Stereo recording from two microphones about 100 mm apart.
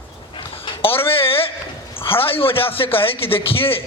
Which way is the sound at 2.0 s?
65° left (ahead or behind).